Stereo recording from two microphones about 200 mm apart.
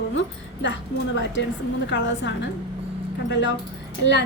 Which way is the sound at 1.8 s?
65° left (ahead or behind).